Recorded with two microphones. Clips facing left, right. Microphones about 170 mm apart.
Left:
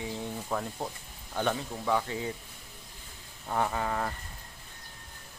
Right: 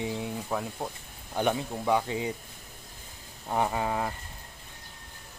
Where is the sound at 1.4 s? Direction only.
15° right (ahead or behind).